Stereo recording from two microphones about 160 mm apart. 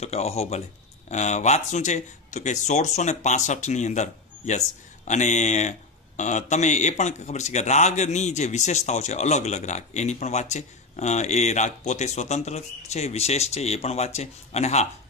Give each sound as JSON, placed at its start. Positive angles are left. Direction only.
{"t": 0.0, "sound": "speech", "side_deg": 40}